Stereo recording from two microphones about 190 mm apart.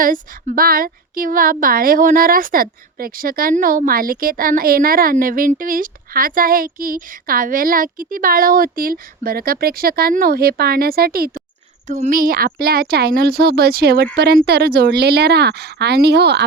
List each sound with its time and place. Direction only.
0.0 s speech: 45° right (ahead or behind)
11.9 s speech: 40° right (ahead or behind); by 16.4 s 60° right (ahead or behind)